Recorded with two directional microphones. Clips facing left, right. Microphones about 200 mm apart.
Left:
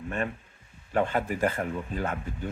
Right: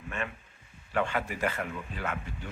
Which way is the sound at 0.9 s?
40° left (ahead or behind).